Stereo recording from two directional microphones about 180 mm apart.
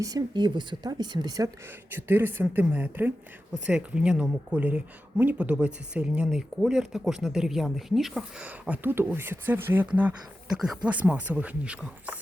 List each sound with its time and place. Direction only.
0.0 s a woman's voice: 20° right (ahead or behind)
1.9 s speech: 10° right (ahead or behind)